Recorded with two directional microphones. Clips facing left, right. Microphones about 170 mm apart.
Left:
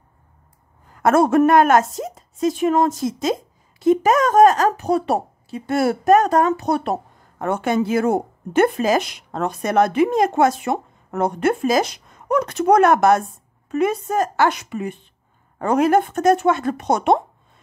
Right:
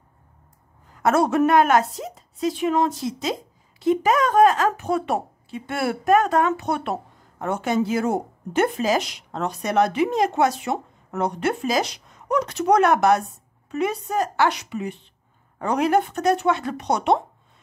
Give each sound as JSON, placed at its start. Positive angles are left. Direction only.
{"t": 1.0, "sound": "a woman's voice", "side_deg": 50}
{"t": 7.3, "sound": "a woman's voice", "side_deg": 55}